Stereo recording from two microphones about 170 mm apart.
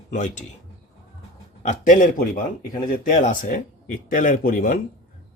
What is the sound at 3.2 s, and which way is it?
Speech, 50° left (ahead or behind).